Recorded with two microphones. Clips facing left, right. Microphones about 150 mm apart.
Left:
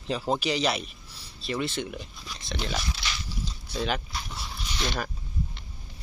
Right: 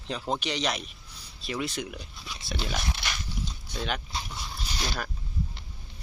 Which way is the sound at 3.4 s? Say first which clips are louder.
Left 6 dB; centre (ahead or behind).